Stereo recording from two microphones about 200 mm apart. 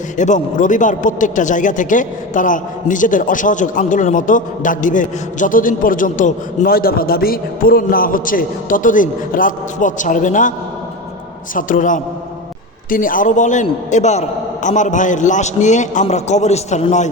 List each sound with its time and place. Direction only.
0.2 s speech: 40° left (ahead or behind)
11.5 s speech: 40° left (ahead or behind)